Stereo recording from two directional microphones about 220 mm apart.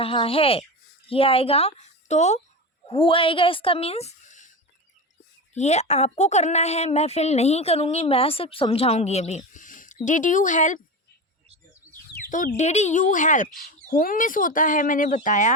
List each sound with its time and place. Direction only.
0.0 s a woman's voice: 25° left (ahead or behind)
5.5 s a woman's voice: 30° left (ahead or behind)
11.9 s bird: 35° left (ahead or behind)
12.5 s a woman's voice: 30° left (ahead or behind)